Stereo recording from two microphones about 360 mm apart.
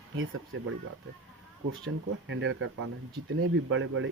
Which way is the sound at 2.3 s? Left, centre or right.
Right.